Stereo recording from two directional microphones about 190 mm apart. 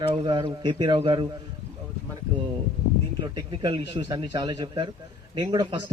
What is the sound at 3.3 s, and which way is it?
Speech, 25° right (ahead or behind).